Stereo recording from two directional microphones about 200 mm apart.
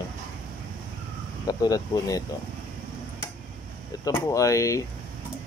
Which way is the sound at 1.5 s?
20° left (ahead or behind).